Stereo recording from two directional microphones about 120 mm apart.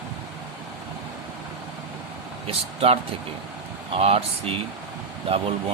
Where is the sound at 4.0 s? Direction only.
55° right (ahead or behind).